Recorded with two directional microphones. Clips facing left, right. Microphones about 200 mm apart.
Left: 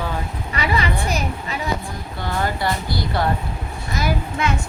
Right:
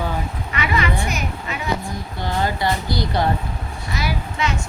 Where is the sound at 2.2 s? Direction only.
20° right (ahead or behind).